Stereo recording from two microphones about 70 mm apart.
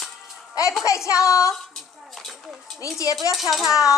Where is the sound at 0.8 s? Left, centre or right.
Left.